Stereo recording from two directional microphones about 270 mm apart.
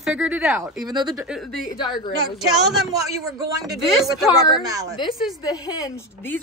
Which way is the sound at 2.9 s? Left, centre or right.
Centre.